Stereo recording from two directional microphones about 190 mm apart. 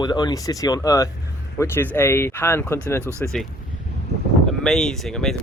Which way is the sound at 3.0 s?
15° right (ahead or behind).